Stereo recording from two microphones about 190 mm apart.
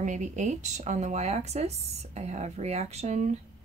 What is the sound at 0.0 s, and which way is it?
Speech, 40° right (ahead or behind).